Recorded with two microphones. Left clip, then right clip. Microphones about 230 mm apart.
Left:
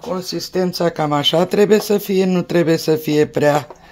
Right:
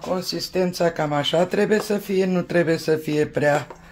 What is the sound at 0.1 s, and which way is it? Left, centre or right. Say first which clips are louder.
Speech: left 3 dB; left.